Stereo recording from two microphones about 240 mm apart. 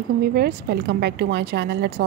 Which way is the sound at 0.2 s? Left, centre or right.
Right.